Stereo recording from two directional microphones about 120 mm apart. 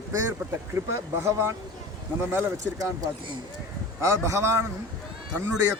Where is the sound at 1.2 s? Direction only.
25° right (ahead or behind).